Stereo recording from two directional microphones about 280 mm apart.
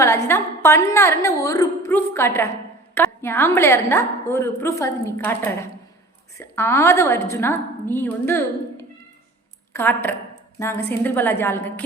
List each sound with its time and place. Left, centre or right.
0.0 s a woman's voice: centre